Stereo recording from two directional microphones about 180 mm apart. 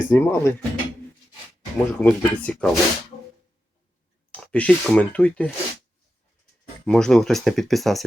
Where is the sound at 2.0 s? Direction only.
10° left (ahead or behind).